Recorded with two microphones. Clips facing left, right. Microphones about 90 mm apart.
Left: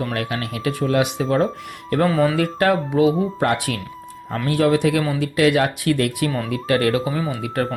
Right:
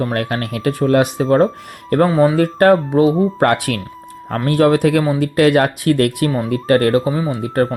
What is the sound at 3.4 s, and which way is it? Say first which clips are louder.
Speech: right 5 dB; 55° right (ahead or behind).